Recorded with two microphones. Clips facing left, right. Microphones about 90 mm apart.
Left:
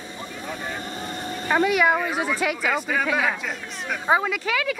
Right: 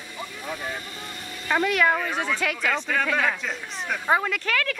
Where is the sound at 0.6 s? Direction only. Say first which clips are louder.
Left 3 dB; 30° left (ahead or behind).